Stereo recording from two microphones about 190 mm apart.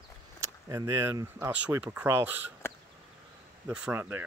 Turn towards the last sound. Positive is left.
turn(degrees=-10)  # may be behind; listen again after turning